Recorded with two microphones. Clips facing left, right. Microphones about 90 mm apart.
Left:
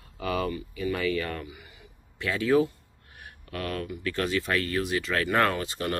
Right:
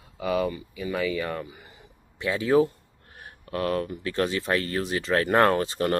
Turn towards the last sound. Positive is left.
turn(degrees=-35)  # may be behind; listen again after turning